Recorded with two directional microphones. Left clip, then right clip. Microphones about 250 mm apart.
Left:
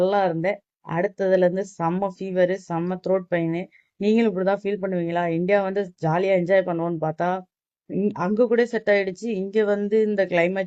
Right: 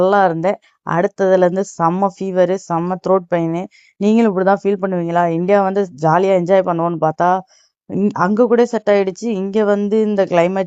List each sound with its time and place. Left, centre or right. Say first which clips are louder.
0.0 s speech: right 8 dB; right